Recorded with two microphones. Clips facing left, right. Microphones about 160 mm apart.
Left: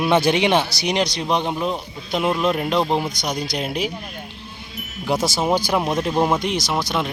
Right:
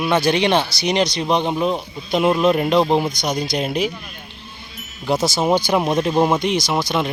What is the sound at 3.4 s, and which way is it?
Speech, 5° left (ahead or behind).